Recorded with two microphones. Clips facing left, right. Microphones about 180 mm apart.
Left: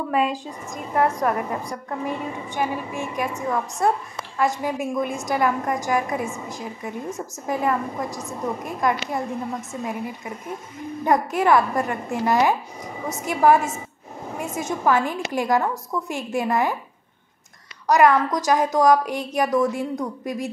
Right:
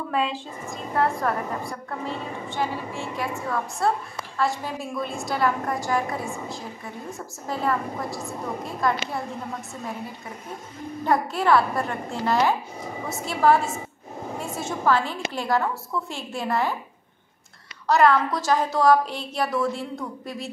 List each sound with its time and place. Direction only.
0.1 s a woman's voice: 10° left (ahead or behind)
11.1 s a woman's voice: 15° left (ahead or behind)
17.8 s a woman's voice: 15° left (ahead or behind)